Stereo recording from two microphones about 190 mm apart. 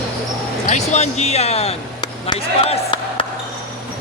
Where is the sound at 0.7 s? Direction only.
35° left (ahead or behind).